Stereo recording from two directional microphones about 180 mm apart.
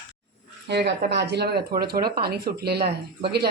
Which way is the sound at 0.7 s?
70° right (ahead or behind).